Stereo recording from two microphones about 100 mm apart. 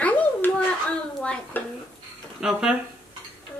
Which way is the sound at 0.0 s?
15° left (ahead or behind).